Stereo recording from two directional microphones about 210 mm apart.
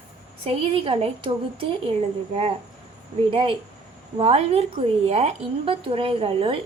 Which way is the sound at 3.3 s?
25° right (ahead or behind).